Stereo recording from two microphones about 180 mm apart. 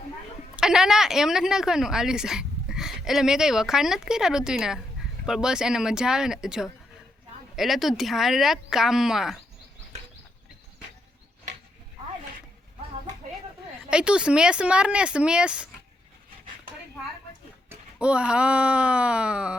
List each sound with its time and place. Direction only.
0.5 s a woman's voice: 5° right (ahead or behind)
13.9 s a woman's voice: 5° right (ahead or behind)
17.7 s speech: 5° right (ahead or behind)